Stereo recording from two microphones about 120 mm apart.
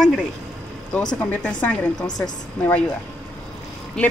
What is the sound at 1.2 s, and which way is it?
Speech, 10° left (ahead or behind).